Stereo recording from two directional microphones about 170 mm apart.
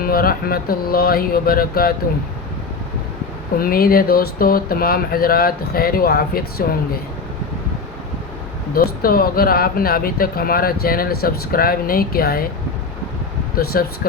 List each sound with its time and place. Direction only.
0.0 s speech: 60° left (ahead or behind)
3.6 s speech: 60° left (ahead or behind)
8.7 s speech: 60° left (ahead or behind)
13.6 s speech: 60° left (ahead or behind)